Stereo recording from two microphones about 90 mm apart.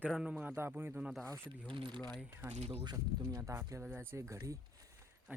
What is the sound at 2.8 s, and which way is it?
Speech, 50° right (ahead or behind).